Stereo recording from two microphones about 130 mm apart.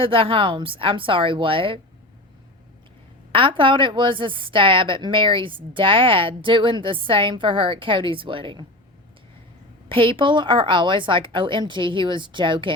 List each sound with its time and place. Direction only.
0.0 s a woman's voice: 45° right (ahead or behind)
3.3 s a woman's voice: 40° right (ahead or behind)
9.9 s a woman's voice: 40° right (ahead or behind)